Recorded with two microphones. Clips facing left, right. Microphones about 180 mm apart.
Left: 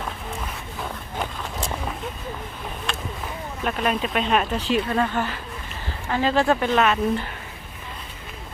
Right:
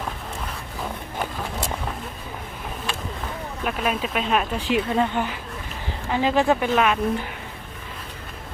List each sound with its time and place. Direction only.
3.6 s speech: 5° right (ahead or behind)
4.6 s speech: 15° right (ahead or behind)